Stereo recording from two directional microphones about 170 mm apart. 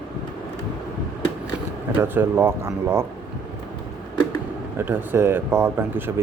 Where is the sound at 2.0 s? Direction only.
15° right (ahead or behind).